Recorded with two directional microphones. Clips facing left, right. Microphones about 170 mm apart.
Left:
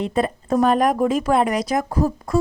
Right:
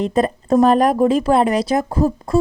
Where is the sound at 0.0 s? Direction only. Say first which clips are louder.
Right 4 dB; 40° right (ahead or behind).